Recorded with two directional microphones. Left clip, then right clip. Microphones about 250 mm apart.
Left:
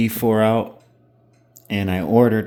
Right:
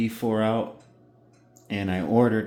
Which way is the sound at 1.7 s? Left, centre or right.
Left.